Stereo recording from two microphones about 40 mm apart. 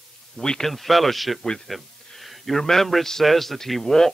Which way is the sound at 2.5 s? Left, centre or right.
Centre.